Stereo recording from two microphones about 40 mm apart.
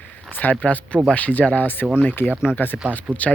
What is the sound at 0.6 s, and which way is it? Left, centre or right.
Speech, left.